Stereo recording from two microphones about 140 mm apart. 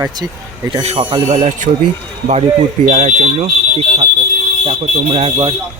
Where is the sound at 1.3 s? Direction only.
55° right (ahead or behind).